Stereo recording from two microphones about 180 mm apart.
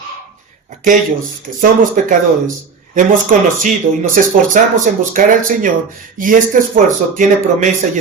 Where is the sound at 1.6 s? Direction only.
50° right (ahead or behind).